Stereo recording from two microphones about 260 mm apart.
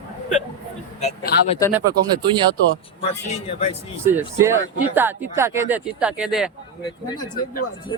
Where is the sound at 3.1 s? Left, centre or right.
Left.